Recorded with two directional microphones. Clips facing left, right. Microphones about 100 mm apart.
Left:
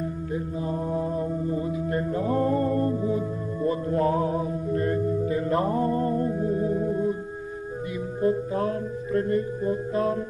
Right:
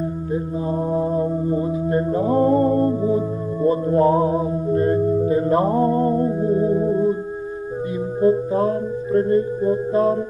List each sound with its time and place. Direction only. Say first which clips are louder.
0.3 s mantra: right 6 dB; 30° right (ahead or behind)
8.2 s music: right 7 dB; 30° right (ahead or behind)